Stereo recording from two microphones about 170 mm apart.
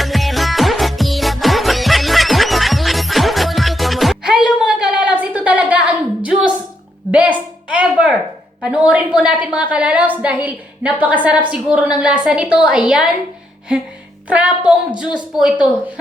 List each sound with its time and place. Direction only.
0.0 s music: centre (ahead or behind)
7.1 s a sound: 10° right (ahead or behind)
8.6 s a woman's voice: 5° right (ahead or behind)
14.3 s a woman's voice: 5° right (ahead or behind)